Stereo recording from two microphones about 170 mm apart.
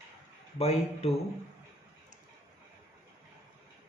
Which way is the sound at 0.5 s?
40° left (ahead or behind).